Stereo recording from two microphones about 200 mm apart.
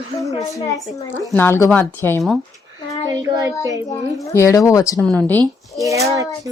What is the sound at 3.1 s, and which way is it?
Speech, 15° right (ahead or behind).